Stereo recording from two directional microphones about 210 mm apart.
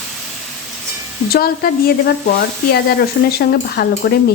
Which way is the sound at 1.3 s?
45° left (ahead or behind).